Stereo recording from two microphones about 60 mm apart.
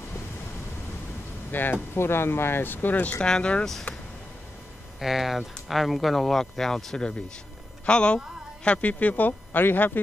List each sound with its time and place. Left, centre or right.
1.5 s speech: left
3.3 s speech: centre
3.9 s a sound: left
5.0 s speech: centre; by 10.0 s left